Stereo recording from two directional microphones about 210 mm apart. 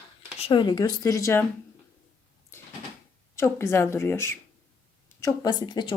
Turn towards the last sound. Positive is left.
turn(degrees=20)  # may be behind; listen again after turning